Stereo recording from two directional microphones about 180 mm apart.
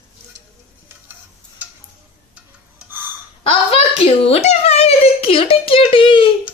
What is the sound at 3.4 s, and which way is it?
A child's voice, 30° left (ahead or behind).